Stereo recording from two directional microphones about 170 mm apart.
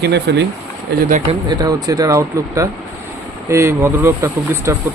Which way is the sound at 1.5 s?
20° right (ahead or behind).